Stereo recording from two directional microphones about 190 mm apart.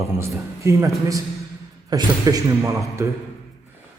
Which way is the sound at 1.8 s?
20° right (ahead or behind).